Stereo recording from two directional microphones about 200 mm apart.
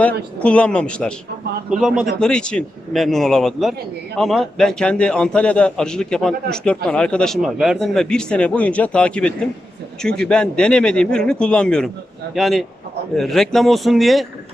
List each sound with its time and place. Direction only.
0.4 s a man's voice: 5° left (ahead or behind)